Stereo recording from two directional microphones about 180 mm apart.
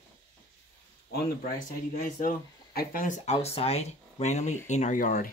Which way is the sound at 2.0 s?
50° left (ahead or behind).